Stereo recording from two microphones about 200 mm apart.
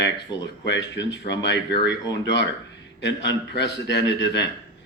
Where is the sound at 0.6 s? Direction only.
60° left (ahead or behind).